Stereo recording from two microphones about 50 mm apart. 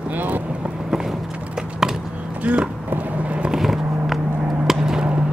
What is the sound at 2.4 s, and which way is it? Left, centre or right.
Vehicle, right.